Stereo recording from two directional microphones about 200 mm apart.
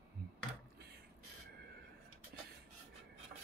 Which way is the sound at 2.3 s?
50° right (ahead or behind).